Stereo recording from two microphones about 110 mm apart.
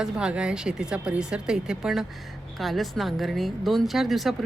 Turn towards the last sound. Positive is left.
turn(degrees=0)  # may be behind; listen again after turning